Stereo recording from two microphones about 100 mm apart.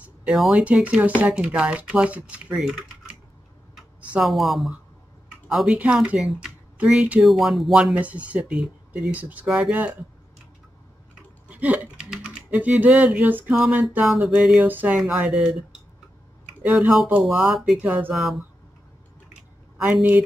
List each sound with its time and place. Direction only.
0.0 s speech: 10° right (ahead or behind)
8.0 s speech: 15° right (ahead or behind)
11.4 s a sound: 15° right (ahead or behind)
12.1 s typing: 10° right (ahead or behind)
13.5 s speech: 10° right (ahead or behind)
15.0 s speech: 5° right (ahead or behind)
16.6 s speech: 15° right (ahead or behind)
17.2 s speech: 5° right (ahead or behind)
17.8 s speech: 15° right (ahead or behind)
18.1 s speech: centre (ahead or behind)
19.8 s speech: 15° right (ahead or behind)